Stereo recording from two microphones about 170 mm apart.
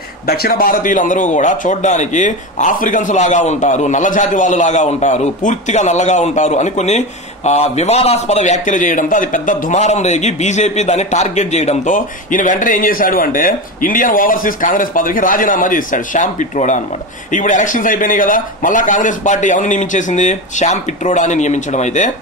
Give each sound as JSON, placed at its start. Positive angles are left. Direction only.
{"t": 0.3, "sound": "a man's voice", "side_deg": 60}